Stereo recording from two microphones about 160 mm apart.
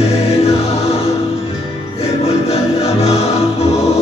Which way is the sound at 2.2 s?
40° left (ahead or behind).